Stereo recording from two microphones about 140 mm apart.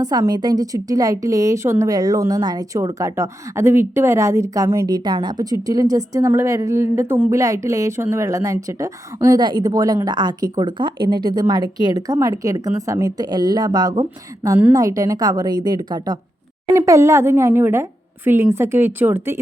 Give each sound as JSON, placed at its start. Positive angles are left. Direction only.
{"t": 0.0, "sound": "a woman's voice", "side_deg": -30}